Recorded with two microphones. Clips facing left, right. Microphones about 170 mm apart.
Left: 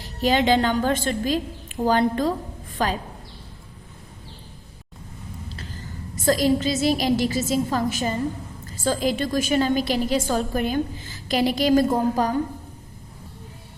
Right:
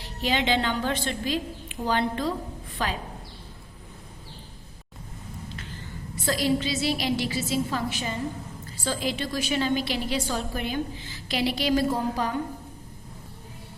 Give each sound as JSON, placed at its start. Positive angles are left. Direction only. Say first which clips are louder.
{"t": 0.0, "sound": "a woman's voice", "louder": "left 6 dB", "side_deg": 45}
{"t": 5.5, "sound": "a sound", "louder": "left 2 dB", "side_deg": 35}
{"t": 6.1, "sound": "a woman's voice", "louder": "left 5 dB", "side_deg": 45}